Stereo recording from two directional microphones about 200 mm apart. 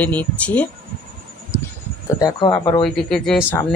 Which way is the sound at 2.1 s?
20° left (ahead or behind).